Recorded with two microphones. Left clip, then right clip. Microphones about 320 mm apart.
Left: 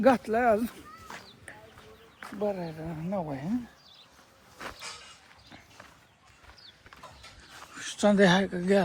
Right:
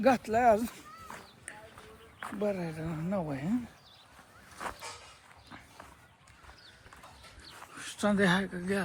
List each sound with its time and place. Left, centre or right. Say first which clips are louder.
0.0 s a woman's voice: left 2 dB; centre
2.4 s a woman's voice: left 2 dB; centre
4.6 s a sound: even; centre
7.7 s speech: left 6 dB; centre